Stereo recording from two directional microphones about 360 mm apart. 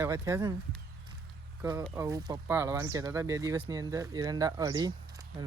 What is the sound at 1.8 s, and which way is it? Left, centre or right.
Speech, centre.